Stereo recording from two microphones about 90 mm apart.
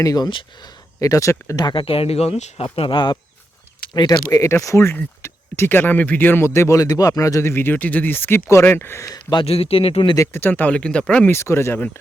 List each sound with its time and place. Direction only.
0.0 s speech: 40° left (ahead or behind)
1.7 s speech: 90° left
2.7 s speech: 70° left (ahead or behind)
3.9 s speech: 45° left (ahead or behind)
7.5 s speech: 20° left (ahead or behind)
9.0 s speech: 45° left (ahead or behind)
9.4 s speech: 90° left
10.2 s speech: 30° left (ahead or behind)
10.5 s speech: 15° left (ahead or behind)
11.3 s speech: 30° left (ahead or behind)